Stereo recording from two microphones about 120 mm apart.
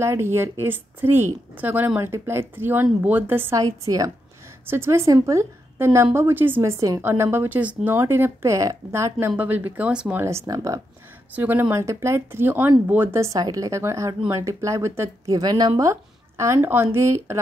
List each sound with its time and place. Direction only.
0.0 s speech: 20° right (ahead or behind)
3.6 s speech: 30° right (ahead or behind)
4.6 s speech: 20° right (ahead or behind)
10.2 s speech: 25° right (ahead or behind)
11.3 s speech: 15° right (ahead or behind)